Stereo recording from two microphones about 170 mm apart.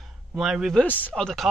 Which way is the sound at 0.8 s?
10° left (ahead or behind).